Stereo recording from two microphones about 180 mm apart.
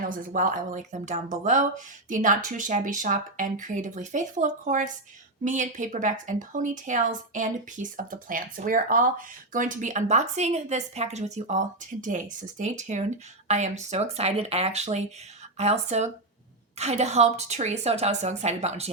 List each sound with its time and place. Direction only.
0.1 s a woman's voice: 50° right (ahead or behind)